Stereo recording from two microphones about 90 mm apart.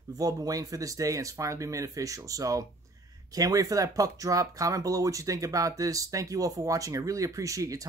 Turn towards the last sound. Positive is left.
turn(degrees=-40)  # may be behind; listen again after turning